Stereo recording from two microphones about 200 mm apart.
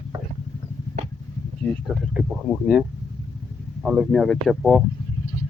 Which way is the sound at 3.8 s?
5° right (ahead or behind).